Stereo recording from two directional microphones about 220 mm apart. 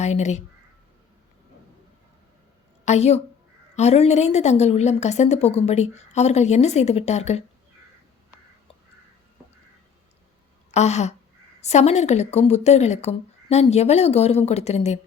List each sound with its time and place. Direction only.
0.0 s a woman's voice: 30° left (ahead or behind)
2.8 s a woman's voice: 30° left (ahead or behind)
10.7 s a woman's voice: 30° left (ahead or behind)